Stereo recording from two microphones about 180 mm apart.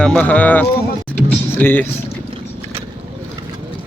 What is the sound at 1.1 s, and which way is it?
Music, 10° left (ahead or behind).